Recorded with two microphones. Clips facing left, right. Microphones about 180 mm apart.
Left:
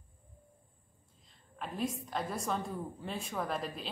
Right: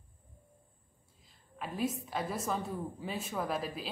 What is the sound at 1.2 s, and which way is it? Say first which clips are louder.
A woman's voice: right 1 dB; 5° right (ahead or behind).